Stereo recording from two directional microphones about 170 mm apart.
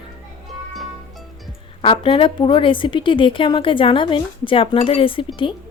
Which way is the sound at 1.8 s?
30° left (ahead or behind).